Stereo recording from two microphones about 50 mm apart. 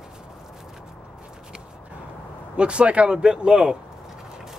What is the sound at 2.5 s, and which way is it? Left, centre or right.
Speech, right.